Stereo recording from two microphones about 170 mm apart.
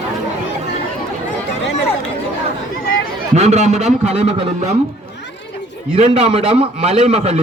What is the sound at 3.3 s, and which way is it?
A man's voice, 40° right (ahead or behind).